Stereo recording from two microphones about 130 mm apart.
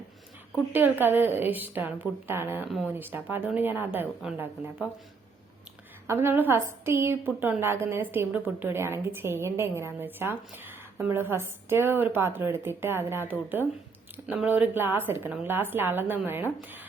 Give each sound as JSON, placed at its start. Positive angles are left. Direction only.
{"t": 0.7, "sound": "a woman's voice", "side_deg": -15}
{"t": 6.1, "sound": "a woman's voice", "side_deg": -15}